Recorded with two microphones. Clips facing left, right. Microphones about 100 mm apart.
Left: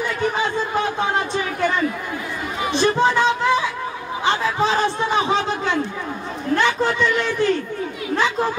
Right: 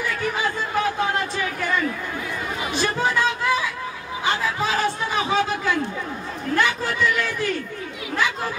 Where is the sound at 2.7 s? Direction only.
25° left (ahead or behind).